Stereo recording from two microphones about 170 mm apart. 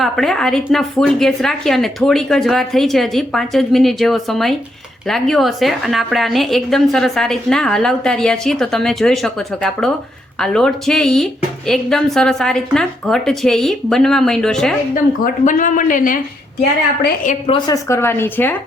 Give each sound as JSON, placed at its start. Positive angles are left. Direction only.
{"t": 0.0, "sound": "a woman's voice", "side_deg": 0}
{"t": 15.2, "sound": "speech", "side_deg": 50}
{"t": 17.2, "sound": "a woman's voice", "side_deg": 35}
{"t": 17.7, "sound": "a woman's voice", "side_deg": 15}